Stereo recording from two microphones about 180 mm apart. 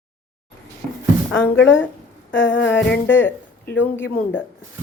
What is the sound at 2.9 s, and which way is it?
Speech, 10° left (ahead or behind).